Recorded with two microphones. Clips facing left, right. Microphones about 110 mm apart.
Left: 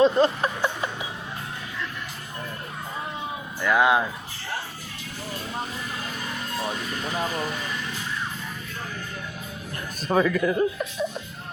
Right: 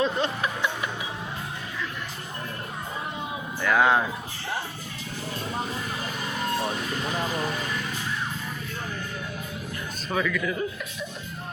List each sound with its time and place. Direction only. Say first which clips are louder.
0.0 s a sound: left 7 dB; 35° left (ahead or behind)
3.6 s speech: left 1 dB; 5° left (ahead or behind)
10.1 s a man's voice: left 6 dB; 35° left (ahead or behind)